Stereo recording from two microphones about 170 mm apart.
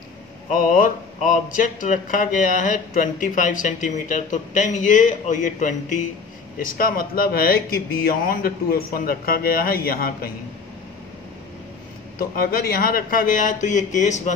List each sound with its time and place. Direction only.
0.5 s speech: 55° left (ahead or behind)
12.2 s speech: 60° left (ahead or behind)